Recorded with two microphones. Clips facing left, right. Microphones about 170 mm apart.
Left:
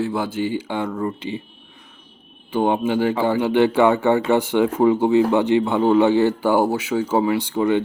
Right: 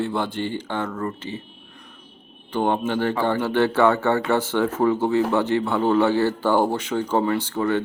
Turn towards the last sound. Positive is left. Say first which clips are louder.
# left 3 dB
turn(degrees=15)  # may be behind; listen again after turning